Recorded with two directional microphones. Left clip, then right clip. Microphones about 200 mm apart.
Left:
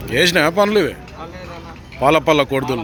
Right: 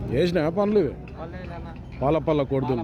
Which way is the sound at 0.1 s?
Centre (ahead or behind).